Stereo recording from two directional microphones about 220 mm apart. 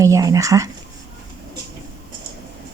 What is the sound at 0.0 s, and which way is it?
Speech, 15° right (ahead or behind).